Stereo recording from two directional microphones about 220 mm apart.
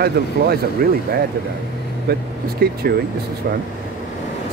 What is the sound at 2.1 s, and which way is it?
Speech, 45° right (ahead or behind).